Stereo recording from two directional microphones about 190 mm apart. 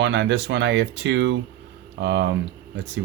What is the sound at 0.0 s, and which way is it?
Speech, 70° right (ahead or behind).